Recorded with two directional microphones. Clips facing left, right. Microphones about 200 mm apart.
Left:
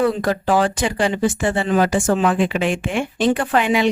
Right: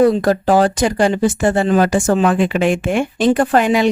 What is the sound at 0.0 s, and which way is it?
Speech, 40° right (ahead or behind).